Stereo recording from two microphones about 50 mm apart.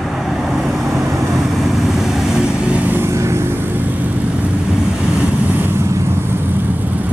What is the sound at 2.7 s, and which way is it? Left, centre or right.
Vehicle, right.